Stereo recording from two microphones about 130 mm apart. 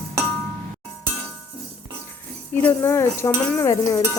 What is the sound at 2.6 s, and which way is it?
Speech, 20° left (ahead or behind).